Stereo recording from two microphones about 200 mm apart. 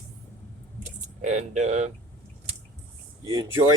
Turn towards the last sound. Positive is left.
turn(degrees=-20)  # may be behind; listen again after turning